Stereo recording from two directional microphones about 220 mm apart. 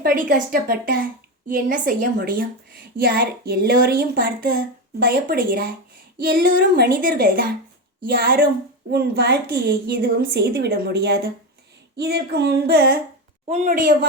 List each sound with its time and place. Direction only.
0.0 s a woman's voice: 40° right (ahead or behind)